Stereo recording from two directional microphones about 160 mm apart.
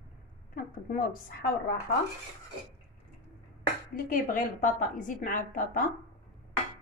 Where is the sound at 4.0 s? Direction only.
60° left (ahead or behind).